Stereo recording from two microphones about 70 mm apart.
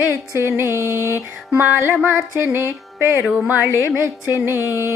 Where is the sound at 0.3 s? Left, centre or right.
Right.